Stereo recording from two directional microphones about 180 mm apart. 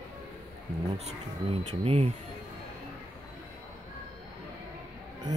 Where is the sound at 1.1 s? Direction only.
35° right (ahead or behind).